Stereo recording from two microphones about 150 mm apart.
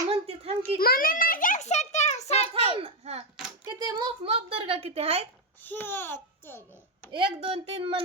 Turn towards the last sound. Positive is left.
turn(degrees=-40)  # may be behind; listen again after turning